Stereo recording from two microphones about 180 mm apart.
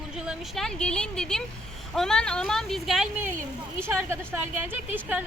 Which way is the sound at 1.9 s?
5° left (ahead or behind).